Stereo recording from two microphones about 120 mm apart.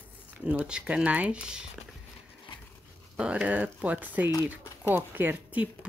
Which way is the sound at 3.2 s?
10° right (ahead or behind).